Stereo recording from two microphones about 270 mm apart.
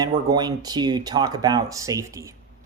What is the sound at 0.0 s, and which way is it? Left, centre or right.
Speech, centre.